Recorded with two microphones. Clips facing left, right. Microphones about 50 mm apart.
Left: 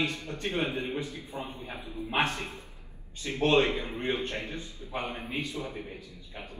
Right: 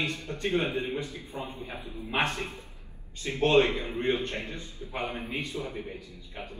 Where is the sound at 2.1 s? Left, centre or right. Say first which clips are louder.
Even; right.